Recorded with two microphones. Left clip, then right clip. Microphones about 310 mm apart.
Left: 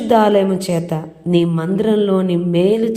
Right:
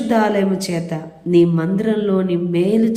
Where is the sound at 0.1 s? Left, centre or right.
Left.